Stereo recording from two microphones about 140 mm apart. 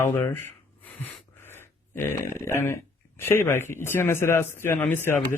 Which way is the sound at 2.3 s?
20° left (ahead or behind).